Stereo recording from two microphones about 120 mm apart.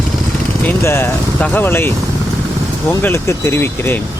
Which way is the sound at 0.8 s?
20° left (ahead or behind).